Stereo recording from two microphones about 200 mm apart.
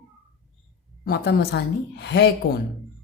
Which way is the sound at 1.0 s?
55° left (ahead or behind).